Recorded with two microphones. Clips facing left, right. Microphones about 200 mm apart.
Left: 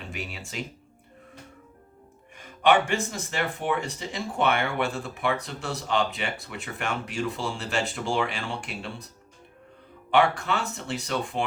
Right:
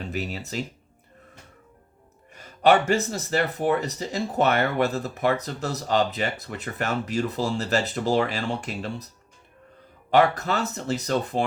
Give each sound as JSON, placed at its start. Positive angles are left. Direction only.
{"t": 0.1, "sound": "speech", "side_deg": -40}
{"t": 2.3, "sound": "speech", "side_deg": -40}
{"t": 10.1, "sound": "speech", "side_deg": -40}